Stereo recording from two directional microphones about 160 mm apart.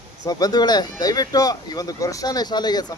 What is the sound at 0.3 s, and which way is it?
Speech, 25° left (ahead or behind).